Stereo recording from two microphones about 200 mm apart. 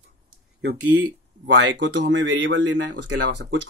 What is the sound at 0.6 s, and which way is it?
Speech, 55° right (ahead or behind).